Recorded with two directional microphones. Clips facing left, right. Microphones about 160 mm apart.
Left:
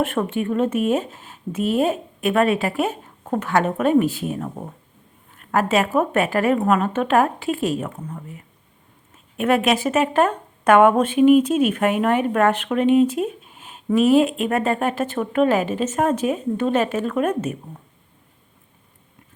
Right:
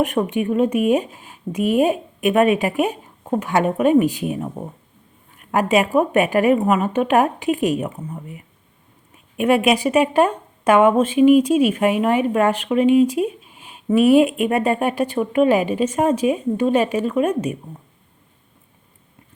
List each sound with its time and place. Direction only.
0.0 s speech: 15° right (ahead or behind)
9.4 s speech: 10° right (ahead or behind)
14.0 s speech: 40° left (ahead or behind)
14.3 s speech: 15° right (ahead or behind)